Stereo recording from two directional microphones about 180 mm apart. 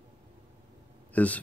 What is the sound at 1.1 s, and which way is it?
Speech, 10° left (ahead or behind).